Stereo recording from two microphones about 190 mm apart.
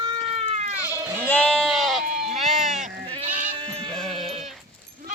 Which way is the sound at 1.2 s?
10° left (ahead or behind).